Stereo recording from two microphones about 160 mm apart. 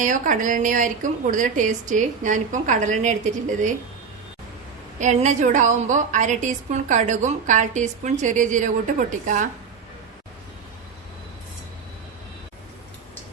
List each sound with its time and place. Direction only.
0.0 s a woman's voice: 55° right (ahead or behind)
4.9 s a woman's voice: 50° right (ahead or behind)